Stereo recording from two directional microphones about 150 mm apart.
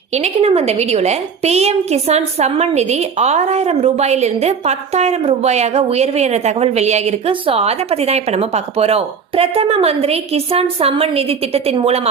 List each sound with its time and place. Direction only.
0.1 s a woman's voice: 45° right (ahead or behind)